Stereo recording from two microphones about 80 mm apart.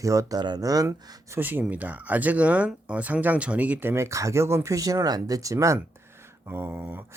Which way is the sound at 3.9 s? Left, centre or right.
Right.